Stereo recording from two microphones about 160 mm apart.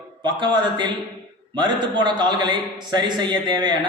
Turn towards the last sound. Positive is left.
turn(degrees=-25)  # may be behind; listen again after turning